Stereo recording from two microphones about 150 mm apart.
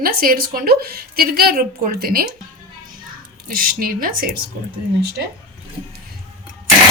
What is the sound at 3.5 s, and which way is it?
Speech, 75° right (ahead or behind).